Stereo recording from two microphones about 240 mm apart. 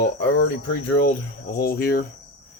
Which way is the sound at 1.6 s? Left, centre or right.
Left.